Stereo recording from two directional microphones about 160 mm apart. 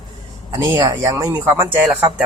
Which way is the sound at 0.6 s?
20° right (ahead or behind).